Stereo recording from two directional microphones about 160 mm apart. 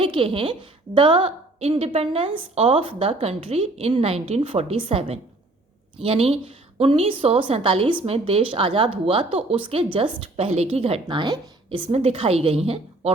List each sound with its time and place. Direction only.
0.0 s a woman's voice: 35° right (ahead or behind)
11.0 s a woman's voice: 25° right (ahead or behind)